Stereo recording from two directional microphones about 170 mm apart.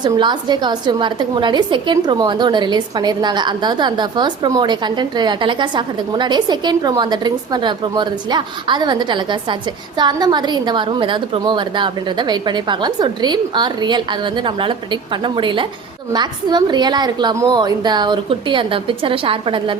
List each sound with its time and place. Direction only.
0.0 s a woman's voice: 25° right (ahead or behind)